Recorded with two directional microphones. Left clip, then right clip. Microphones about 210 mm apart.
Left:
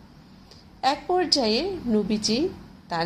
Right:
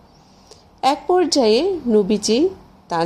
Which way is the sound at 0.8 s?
35° right (ahead or behind).